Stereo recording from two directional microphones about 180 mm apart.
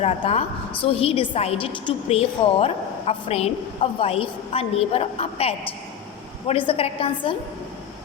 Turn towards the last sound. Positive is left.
turn(degrees=30)  # may be behind; listen again after turning